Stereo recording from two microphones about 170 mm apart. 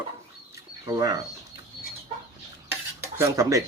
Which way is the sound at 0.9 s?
20° right (ahead or behind).